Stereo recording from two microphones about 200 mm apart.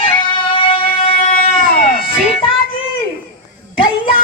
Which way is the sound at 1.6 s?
45° left (ahead or behind).